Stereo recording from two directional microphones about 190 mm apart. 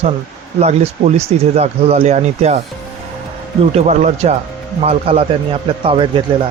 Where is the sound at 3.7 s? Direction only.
35° right (ahead or behind).